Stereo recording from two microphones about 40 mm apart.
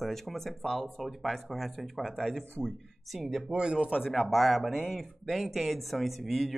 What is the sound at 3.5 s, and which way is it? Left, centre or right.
Speech, right.